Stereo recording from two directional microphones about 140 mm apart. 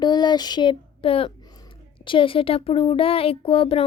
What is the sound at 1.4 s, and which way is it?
Speech, 30° left (ahead or behind).